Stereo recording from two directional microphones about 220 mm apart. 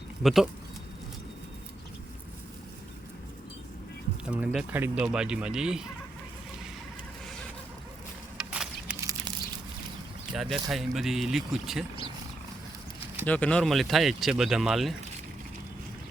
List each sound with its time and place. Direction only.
0.2 s speech: centre (ahead or behind)
4.3 s speech: 5° right (ahead or behind)
8.4 s a sound: 5° right (ahead or behind)
10.3 s speech: centre (ahead or behind)
13.2 s speech: 5° left (ahead or behind)